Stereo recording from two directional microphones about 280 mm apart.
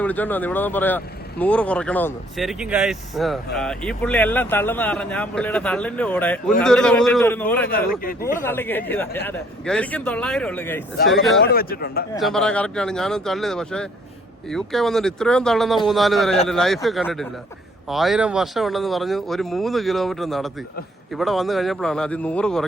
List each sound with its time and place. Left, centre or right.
0.0 s speech: centre
7.7 s speech: left
8.4 s speech: centre
11.4 s speech: left
12.2 s speech: centre